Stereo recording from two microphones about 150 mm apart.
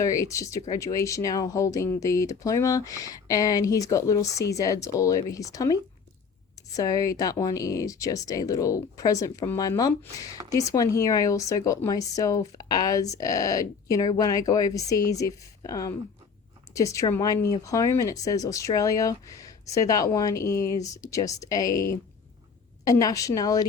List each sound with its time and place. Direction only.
0.0 s speech: 20° left (ahead or behind)